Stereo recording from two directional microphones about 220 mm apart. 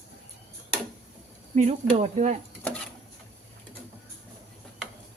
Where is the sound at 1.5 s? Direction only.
30° right (ahead or behind).